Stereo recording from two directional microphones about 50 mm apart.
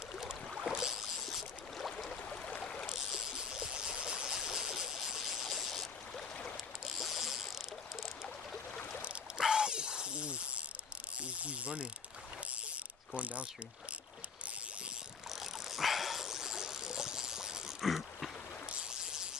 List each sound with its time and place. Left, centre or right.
0.7 s boat: centre
1.3 s boat: centre
2.6 s boat: centre
2.9 s a sound: centre
6.9 s boat: centre
9.4 s snake: centre
11.1 s mechanisms: right
13.1 s mechanisms: right
15.3 s dog: centre